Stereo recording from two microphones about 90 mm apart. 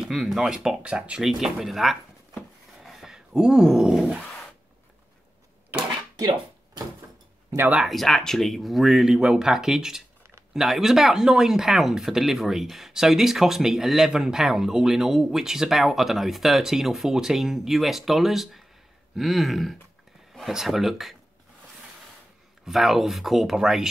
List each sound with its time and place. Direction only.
0.0 s speech: 5° right (ahead or behind)
2.8 s a sound: 5° right (ahead or behind)
6.1 s dishes: 45° right (ahead or behind)
7.5 s speech: 20° right (ahead or behind)
7.8 s speech: centre (ahead or behind)
22.7 s speech: centre (ahead or behind)